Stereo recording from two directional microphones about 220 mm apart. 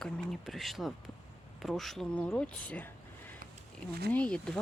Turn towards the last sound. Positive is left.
turn(degrees=5)  # may be behind; listen again after turning